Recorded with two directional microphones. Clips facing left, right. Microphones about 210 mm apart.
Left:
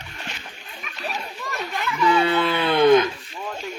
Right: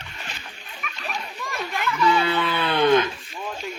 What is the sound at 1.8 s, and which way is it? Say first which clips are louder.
Livestock: left 2 dB; 15° left (ahead or behind).